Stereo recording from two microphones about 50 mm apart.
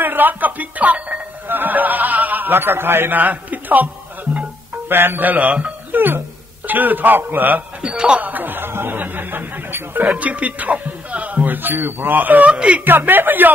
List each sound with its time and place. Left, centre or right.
0.0 s speech: right
1.5 s speech: right
4.8 s speech: right
5.9 s a man's voice: right
7.8 s speech: centre
8.2 s speech: right
10.1 s speech: right
12.4 s a woman's voice: right
12.8 s a man's voice: right